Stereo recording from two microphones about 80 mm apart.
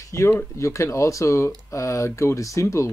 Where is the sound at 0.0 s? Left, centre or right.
Left.